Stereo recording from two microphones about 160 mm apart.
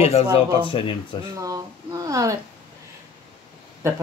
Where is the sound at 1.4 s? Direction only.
20° right (ahead or behind).